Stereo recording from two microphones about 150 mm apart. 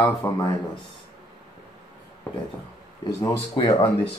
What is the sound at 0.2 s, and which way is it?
Speech, 15° left (ahead or behind).